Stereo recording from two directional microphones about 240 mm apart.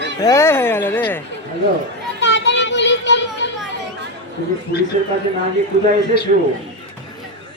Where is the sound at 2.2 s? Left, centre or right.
Left.